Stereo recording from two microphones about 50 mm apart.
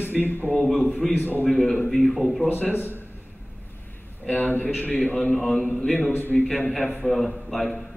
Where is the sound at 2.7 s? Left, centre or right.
Left.